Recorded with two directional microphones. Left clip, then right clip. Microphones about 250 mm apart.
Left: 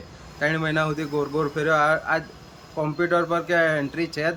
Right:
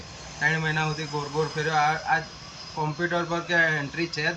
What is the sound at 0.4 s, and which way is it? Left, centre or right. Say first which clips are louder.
Speech: left 2 dB; centre.